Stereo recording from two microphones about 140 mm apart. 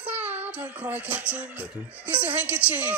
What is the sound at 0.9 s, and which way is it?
Speech, 10° right (ahead or behind).